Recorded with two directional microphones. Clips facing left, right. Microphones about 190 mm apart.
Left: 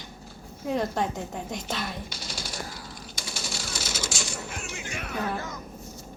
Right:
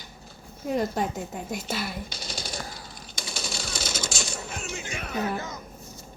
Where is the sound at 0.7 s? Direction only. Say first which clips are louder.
Right 1 dB; 5° right (ahead or behind).